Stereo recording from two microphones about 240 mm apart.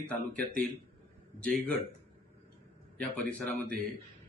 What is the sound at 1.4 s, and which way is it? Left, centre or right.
Speech, centre.